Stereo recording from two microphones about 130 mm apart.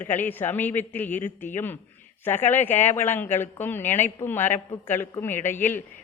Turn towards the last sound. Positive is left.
turn(degrees=15)  # may be behind; listen again after turning